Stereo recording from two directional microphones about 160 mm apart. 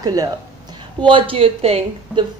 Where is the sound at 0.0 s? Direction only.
25° right (ahead or behind).